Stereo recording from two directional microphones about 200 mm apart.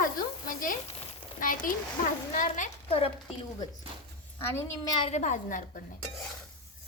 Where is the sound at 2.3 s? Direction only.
40° left (ahead or behind).